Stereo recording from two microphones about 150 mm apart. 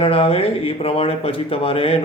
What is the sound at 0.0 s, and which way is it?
Speech, 40° left (ahead or behind).